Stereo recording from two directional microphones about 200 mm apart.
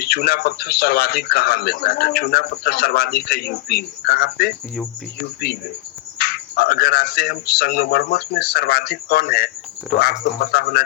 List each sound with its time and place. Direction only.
0.0 s speech: 50° left (ahead or behind)
6.1 s speech: 50° left (ahead or behind)